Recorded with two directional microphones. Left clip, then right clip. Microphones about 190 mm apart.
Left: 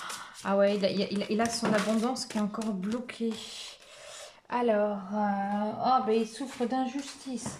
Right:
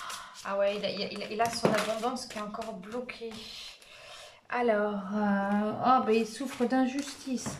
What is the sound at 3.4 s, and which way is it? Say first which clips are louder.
Music: left 1 dB; 40° left (ahead or behind).